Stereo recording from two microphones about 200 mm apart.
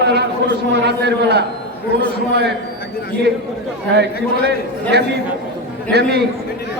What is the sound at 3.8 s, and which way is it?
Speech, 55° right (ahead or behind).